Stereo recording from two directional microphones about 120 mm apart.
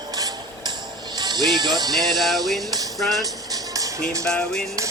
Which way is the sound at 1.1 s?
35° right (ahead or behind).